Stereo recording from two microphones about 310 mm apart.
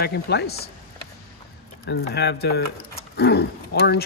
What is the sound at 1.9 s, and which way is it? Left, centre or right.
Speech, left.